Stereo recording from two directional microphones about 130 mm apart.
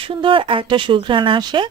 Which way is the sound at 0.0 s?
40° right (ahead or behind).